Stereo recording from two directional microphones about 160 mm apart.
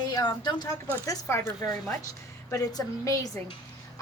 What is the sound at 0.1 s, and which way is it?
A woman's voice, 25° left (ahead or behind).